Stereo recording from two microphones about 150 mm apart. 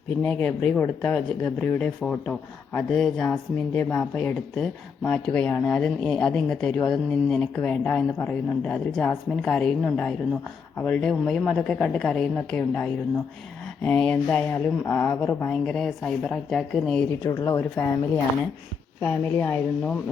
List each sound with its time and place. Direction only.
0.2 s speech: 5° left (ahead or behind)
17.1 s speech: 20° left (ahead or behind)
19.0 s speech: 10° left (ahead or behind)